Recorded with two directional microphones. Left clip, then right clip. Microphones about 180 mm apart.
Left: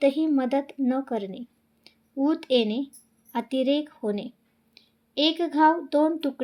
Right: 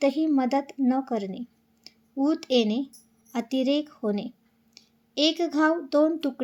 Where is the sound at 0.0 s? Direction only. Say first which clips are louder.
Left 1 dB; 10° right (ahead or behind).